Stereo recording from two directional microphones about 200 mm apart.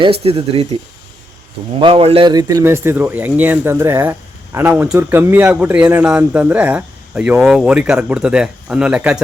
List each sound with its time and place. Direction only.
0.0 s speech: 30° right (ahead or behind)
1.8 s a man's voice: 30° right (ahead or behind); by 9.2 s 5° right (ahead or behind)